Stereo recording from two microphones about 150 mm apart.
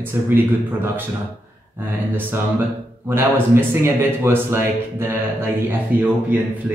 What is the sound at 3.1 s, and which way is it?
Speech, 15° right (ahead or behind).